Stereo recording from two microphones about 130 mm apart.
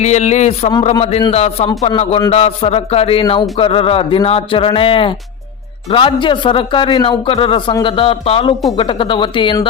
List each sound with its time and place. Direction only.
0.0 s a man's voice: 60° left (ahead or behind); by 9.6 s 40° left (ahead or behind)